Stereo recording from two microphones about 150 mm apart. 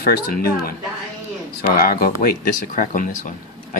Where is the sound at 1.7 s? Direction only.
80° left.